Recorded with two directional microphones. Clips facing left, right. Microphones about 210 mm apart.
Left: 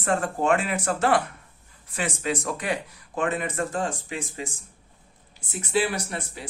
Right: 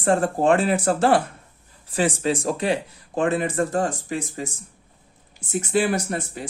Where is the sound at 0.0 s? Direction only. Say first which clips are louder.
Right 5 dB; 30° right (ahead or behind).